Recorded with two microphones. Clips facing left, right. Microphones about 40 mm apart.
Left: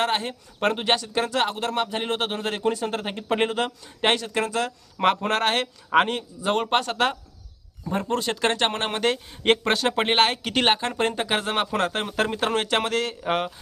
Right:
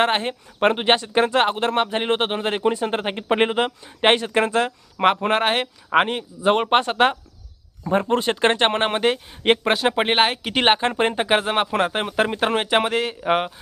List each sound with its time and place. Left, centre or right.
0.0 s speech: right
4.9 s speech: centre
10.7 s speech: right